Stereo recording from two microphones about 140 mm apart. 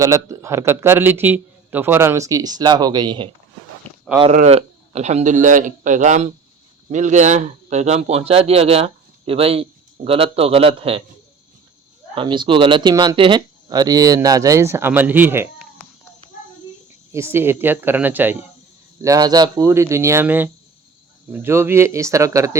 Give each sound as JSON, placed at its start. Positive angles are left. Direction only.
{"t": 0.0, "sound": "speech", "side_deg": -20}
{"t": 4.3, "sound": "a man's voice", "side_deg": -50}
{"t": 12.1, "sound": "speech", "side_deg": -35}
{"t": 17.1, "sound": "speech", "side_deg": -20}
{"t": 19.0, "sound": "speech", "side_deg": -25}